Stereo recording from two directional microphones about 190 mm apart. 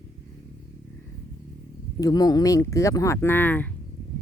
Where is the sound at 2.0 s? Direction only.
20° left (ahead or behind).